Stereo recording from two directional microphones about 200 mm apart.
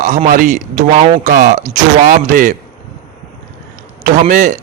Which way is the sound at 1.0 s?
30° right (ahead or behind).